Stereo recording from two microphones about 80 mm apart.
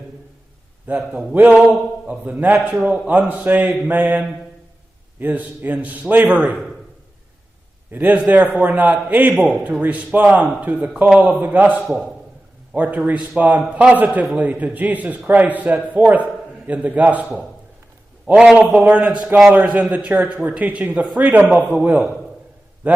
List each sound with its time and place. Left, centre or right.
0.8 s speech: right
2.7 s a man's voice: centre
3.1 s speech: centre
5.2 s speech: right
7.9 s speech: right
11.8 s a man's voice: centre
12.7 s a man's voice: right
19.5 s a man's voice: centre